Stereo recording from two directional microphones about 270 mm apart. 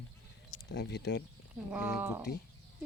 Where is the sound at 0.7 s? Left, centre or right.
Left.